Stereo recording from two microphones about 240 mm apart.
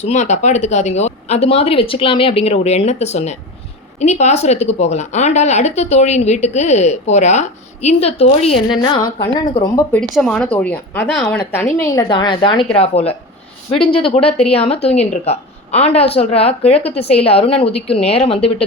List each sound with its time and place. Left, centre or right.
0.0 s a woman's voice: left
10.0 s a woman's voice: centre; by 18.5 s left